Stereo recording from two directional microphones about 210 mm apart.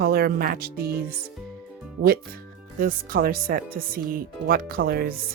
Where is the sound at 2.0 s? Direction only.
45° right (ahead or behind).